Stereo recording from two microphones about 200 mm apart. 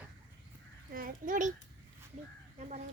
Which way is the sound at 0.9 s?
45° right (ahead or behind).